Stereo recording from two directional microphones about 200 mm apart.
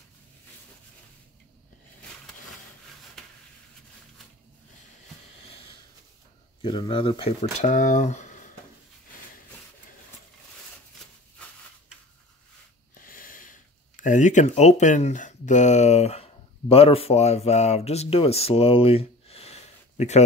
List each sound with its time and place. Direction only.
3.2 s a sound: centre (ahead or behind)
6.6 s speech: 25° left (ahead or behind)
12.9 s speech: 45° left (ahead or behind)